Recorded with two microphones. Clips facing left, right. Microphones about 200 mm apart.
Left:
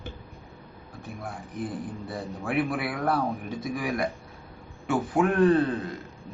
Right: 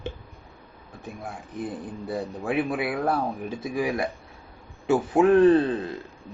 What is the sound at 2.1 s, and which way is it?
Speech, 20° right (ahead or behind).